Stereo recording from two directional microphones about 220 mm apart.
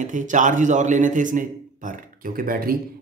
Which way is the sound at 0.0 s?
35° right (ahead or behind).